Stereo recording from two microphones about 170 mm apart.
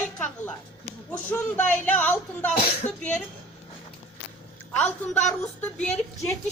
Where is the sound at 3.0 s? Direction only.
5° left (ahead or behind).